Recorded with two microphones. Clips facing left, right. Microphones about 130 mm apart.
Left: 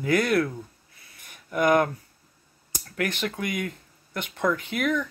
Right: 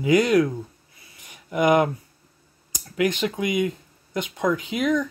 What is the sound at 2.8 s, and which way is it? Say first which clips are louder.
Speech: right 6 dB; 15° right (ahead or behind).